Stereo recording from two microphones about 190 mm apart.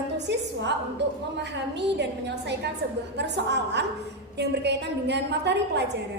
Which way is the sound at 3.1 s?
65° right (ahead or behind).